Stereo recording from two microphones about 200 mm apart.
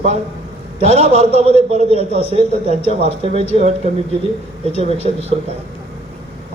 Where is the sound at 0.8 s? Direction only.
30° right (ahead or behind).